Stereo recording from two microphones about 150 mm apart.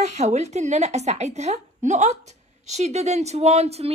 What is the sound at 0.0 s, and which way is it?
A woman's voice, 50° right (ahead or behind).